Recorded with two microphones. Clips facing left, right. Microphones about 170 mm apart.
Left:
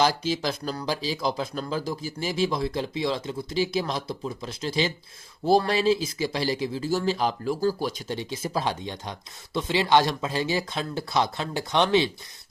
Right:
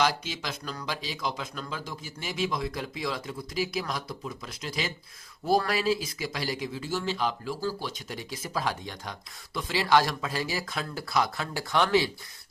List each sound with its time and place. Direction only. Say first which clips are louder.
0.0 s speech: left 4 dB; 35° left (ahead or behind)
8.0 s speech: left 7 dB; 25° left (ahead or behind)